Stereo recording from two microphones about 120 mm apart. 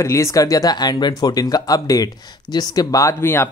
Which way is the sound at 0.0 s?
25° left (ahead or behind).